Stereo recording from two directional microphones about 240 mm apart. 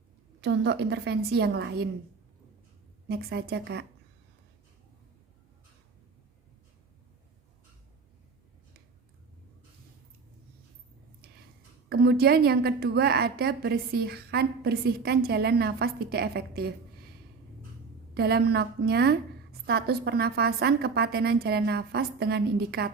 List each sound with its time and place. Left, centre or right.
0.4 s a woman's voice: right
3.1 s a woman's voice: right
11.9 s a woman's voice: right
18.1 s a woman's voice: right